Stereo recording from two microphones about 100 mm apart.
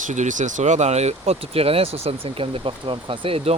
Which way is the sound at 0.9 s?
90° right.